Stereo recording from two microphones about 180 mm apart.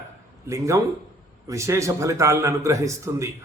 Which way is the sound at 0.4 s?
15° right (ahead or behind).